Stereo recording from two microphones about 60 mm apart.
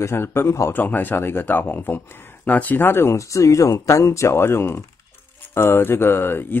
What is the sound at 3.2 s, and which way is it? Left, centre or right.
Speech, left.